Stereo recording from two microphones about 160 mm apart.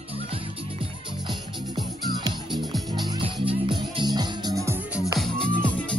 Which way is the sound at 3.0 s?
35° right (ahead or behind).